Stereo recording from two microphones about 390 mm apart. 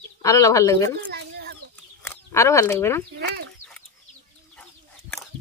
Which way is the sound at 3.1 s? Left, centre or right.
Right.